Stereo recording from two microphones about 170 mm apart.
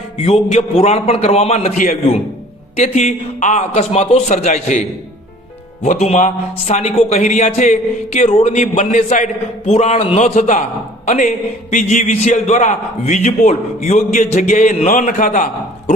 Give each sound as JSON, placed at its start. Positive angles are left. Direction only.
{"t": 0.2, "sound": "a man's voice", "side_deg": 40}